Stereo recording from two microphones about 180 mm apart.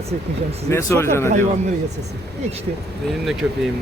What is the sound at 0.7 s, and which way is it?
Speech, 15° left (ahead or behind).